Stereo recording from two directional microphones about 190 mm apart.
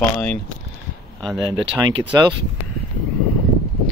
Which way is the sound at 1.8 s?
20° right (ahead or behind).